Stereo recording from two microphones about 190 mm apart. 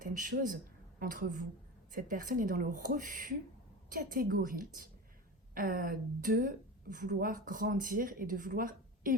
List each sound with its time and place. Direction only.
0.0 s a woman's voice: 45° right (ahead or behind)